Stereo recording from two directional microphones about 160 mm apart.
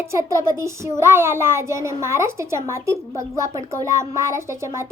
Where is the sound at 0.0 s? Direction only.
20° right (ahead or behind).